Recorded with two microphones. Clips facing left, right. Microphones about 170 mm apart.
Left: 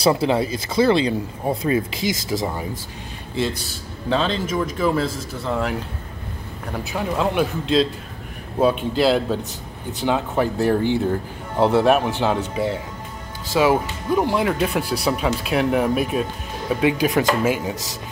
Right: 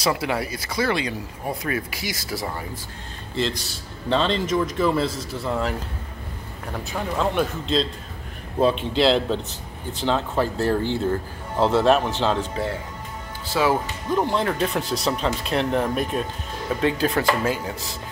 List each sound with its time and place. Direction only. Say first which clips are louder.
0.0 s speech: left 6 dB; 25° left (ahead or behind)
4.1 s a man's voice: even; 5° left (ahead or behind)
6.7 s a man's voice: left 3 dB; 5° left (ahead or behind)